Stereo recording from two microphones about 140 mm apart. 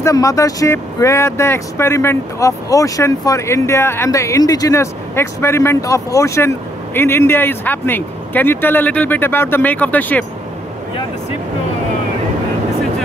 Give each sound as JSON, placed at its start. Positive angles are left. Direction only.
{"t": 0.0, "sound": "speech", "side_deg": 25}